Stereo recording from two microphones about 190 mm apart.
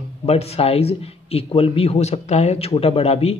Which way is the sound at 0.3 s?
35° left (ahead or behind).